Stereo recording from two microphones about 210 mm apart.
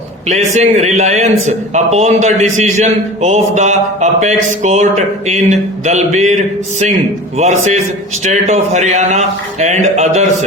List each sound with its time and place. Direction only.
0.3 s a man's voice: 30° right (ahead or behind)